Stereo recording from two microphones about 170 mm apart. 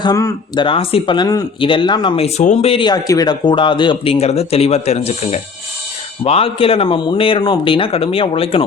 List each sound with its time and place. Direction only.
0.0 s speech: 20° left (ahead or behind)
0.6 s speech: 30° left (ahead or behind)